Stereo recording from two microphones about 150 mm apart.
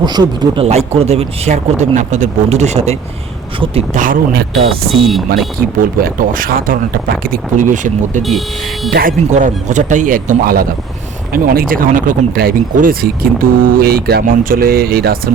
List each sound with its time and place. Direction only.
0.0 s speech: 30° right (ahead or behind)
0.7 s speech: 45° right (ahead or behind)
3.9 s speech: 65° right (ahead or behind); by 4.7 s 85° right
4.9 s speech: centre (ahead or behind)
5.5 s speech: 75° right (ahead or behind); by 8.2 s 55° right (ahead or behind)
9.3 s speech: 55° right (ahead or behind); by 15.2 s 90° right